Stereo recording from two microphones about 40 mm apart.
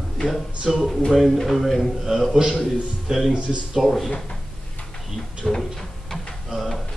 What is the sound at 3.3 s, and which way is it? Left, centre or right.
Speech, right.